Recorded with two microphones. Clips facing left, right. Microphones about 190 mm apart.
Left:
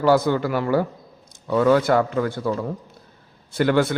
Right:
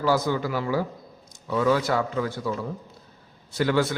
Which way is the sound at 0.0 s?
60° left (ahead or behind).